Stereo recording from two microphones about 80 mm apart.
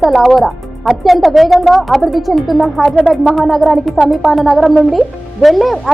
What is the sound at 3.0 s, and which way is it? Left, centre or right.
Speech, centre.